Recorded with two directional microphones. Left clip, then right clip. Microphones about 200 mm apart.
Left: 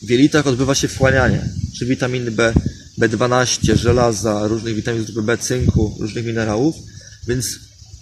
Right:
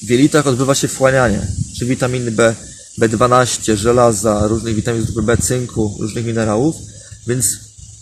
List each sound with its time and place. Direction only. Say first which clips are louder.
0.1 s speech: right 2 dB; 15° left (ahead or behind)